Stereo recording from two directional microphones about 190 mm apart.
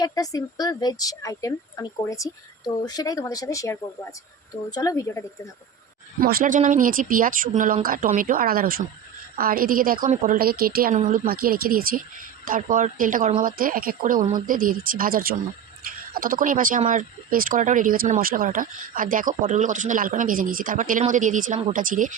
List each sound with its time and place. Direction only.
0.0 s a woman's voice: 20° left (ahead or behind)
6.1 s speech: 50° right (ahead or behind)